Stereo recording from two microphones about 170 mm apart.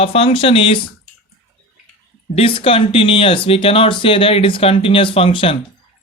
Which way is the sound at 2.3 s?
35° left (ahead or behind).